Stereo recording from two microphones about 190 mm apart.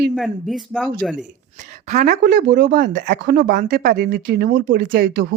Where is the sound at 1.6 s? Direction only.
40° right (ahead or behind).